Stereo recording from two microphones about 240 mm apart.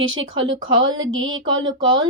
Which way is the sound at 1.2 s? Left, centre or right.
Centre.